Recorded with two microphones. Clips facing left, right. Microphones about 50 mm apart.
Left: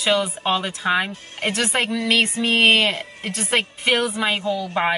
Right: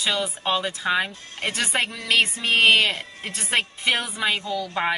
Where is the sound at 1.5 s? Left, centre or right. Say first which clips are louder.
Left 3 dB; centre.